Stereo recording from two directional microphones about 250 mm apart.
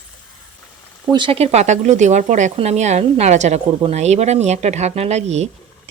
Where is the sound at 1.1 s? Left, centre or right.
Right.